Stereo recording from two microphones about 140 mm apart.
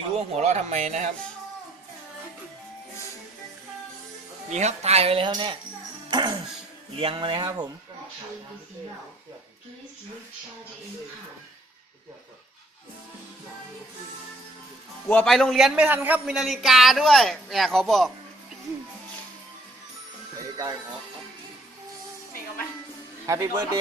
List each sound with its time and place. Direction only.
0.2 s speech: 50° right (ahead or behind)
4.5 s speech: 50° right (ahead or behind); by 5.5 s 35° right (ahead or behind)
6.1 s music: 30° right (ahead or behind)
7.0 s speech: 40° right (ahead or behind)
15.0 s a man's voice: 5° left (ahead or behind)
23.2 s speech: 20° right (ahead or behind)